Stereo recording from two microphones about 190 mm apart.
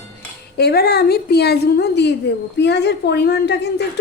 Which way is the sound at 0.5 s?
55° left (ahead or behind).